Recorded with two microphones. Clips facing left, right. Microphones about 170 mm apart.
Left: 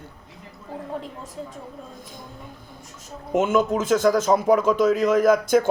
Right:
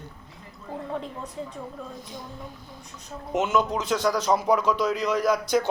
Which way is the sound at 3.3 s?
50° left (ahead or behind).